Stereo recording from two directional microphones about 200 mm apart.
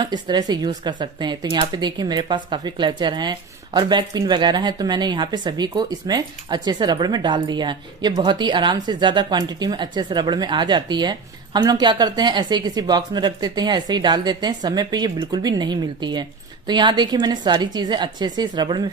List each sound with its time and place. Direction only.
0.0 s speech: 20° right (ahead or behind)